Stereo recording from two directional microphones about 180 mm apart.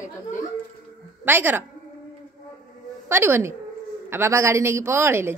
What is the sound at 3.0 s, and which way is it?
A woman's voice, 15° right (ahead or behind).